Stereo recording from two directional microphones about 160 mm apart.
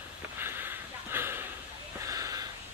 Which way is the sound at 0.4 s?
15° right (ahead or behind).